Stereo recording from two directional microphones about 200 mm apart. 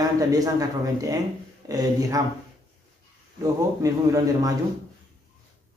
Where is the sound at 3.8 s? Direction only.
15° right (ahead or behind).